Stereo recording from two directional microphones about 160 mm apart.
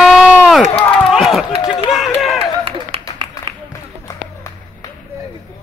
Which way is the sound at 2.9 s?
35° right (ahead or behind).